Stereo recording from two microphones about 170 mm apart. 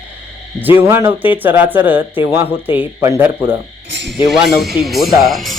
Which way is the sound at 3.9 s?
90° right.